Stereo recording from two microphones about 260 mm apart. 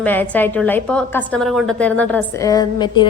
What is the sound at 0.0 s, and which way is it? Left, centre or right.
A woman's voice, centre.